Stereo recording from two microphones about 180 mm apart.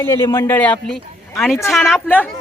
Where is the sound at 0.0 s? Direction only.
15° left (ahead or behind).